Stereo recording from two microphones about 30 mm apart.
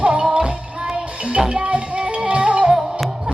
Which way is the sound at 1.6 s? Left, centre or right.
Right.